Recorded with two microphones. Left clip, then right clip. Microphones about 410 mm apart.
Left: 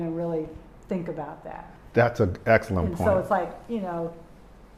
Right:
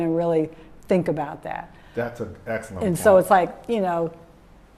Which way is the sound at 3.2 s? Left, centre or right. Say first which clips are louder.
Right 8 dB; right.